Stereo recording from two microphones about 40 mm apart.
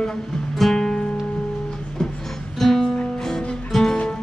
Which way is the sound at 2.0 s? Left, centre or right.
Centre.